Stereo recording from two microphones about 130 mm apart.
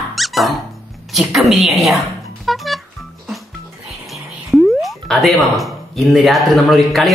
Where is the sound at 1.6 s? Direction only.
Centre (ahead or behind).